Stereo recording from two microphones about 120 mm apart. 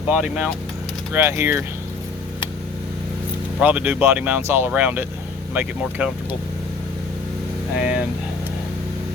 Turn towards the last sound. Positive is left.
turn(degrees=-10)  # may be behind; listen again after turning